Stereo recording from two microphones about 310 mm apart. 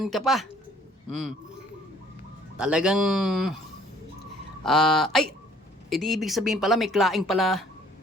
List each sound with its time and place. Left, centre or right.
0.0 s speech: centre
2.6 s speech: centre
4.6 s speech: centre